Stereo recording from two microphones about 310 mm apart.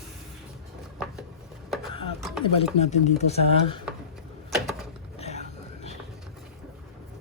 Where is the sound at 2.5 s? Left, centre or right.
Left.